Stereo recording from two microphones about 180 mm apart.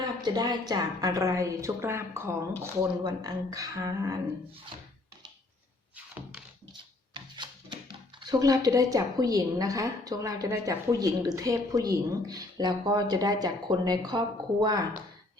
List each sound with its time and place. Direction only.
0.2 s a woman's voice: 25° right (ahead or behind)
7.1 s speech: 25° right (ahead or behind)